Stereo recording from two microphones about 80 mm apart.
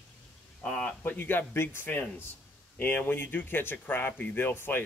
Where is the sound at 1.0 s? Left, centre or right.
Left.